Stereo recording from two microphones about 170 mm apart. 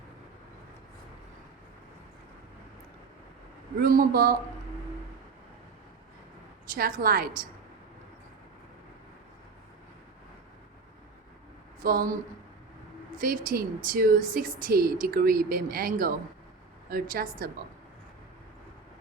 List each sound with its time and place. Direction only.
3.8 s speech: 60° right (ahead or behind)
6.7 s speech: 60° right (ahead or behind)
11.8 s speech: 55° right (ahead or behind)
13.1 s speech: 55° right (ahead or behind)